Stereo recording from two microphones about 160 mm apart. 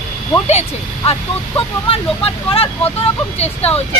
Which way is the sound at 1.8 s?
35° left (ahead or behind).